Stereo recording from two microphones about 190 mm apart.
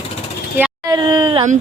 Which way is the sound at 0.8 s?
20° right (ahead or behind).